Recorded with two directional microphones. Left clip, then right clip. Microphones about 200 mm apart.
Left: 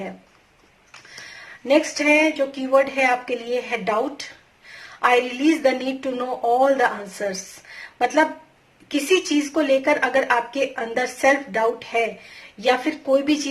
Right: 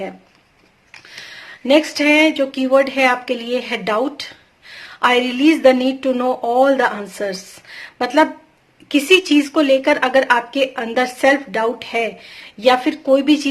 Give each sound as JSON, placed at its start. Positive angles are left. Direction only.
{"t": 1.2, "sound": "speech", "side_deg": -35}
{"t": 4.9, "sound": "speech", "side_deg": -35}